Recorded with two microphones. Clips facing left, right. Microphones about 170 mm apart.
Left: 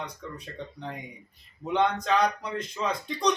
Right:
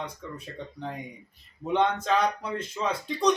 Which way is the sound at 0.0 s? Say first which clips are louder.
Right 1 dB; 5° right (ahead or behind).